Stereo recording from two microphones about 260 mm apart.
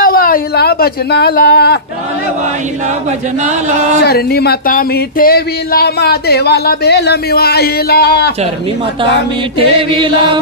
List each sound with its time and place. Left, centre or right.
0.0 s speech: left
4.0 s a sound: left
9.6 s chant: centre